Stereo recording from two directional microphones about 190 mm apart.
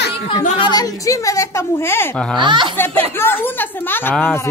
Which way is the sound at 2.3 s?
25° right (ahead or behind).